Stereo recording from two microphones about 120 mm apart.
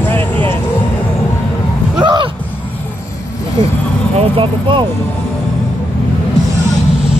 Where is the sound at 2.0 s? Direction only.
40° right (ahead or behind).